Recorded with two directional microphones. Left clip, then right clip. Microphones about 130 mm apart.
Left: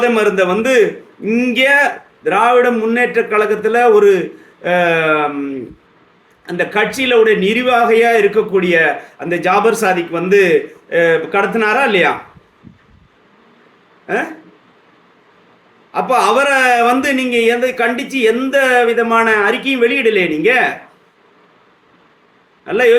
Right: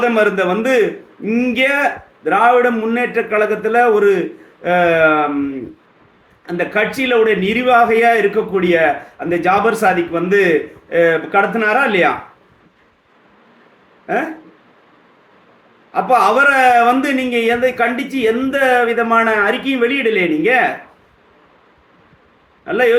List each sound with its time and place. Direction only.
0.0 s a man's voice: 20° left (ahead or behind)
6.4 s a man's voice: 20° left (ahead or behind)
15.9 s a man's voice: 15° left (ahead or behind)
22.6 s a man's voice: 20° left (ahead or behind)